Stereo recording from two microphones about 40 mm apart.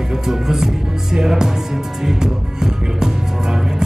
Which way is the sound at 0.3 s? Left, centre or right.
Centre.